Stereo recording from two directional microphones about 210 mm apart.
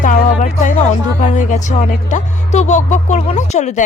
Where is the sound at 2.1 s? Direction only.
35° left (ahead or behind).